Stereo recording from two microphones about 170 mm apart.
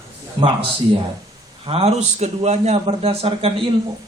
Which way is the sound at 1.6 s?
35° right (ahead or behind).